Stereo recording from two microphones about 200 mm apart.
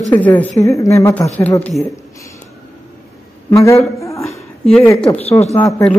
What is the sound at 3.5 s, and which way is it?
A woman's voice, 15° left (ahead or behind).